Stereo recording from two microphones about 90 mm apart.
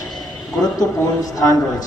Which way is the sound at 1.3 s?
40° left (ahead or behind).